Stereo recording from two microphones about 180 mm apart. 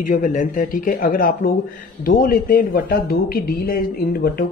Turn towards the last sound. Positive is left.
turn(degrees=55)  # may be behind; listen again after turning